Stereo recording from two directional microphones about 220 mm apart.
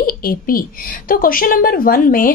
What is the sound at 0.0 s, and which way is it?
A woman's voice, 40° left (ahead or behind).